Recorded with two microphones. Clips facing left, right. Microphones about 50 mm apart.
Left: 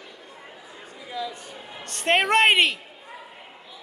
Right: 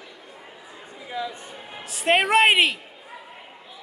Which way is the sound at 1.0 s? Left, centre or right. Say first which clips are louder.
Right 1 dB; centre.